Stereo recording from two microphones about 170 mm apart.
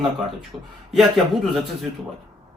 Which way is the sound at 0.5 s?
25° right (ahead or behind).